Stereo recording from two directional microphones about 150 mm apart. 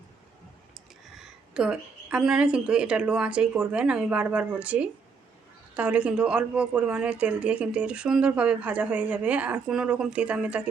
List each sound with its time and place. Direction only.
1.1 s speech: 5° right (ahead or behind)